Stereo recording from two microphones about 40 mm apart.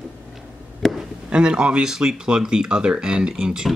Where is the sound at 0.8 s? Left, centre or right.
Centre.